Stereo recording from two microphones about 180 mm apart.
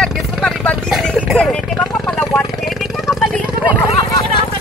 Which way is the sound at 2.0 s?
10° left (ahead or behind).